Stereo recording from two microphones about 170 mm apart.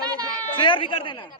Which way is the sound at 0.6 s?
30° left (ahead or behind).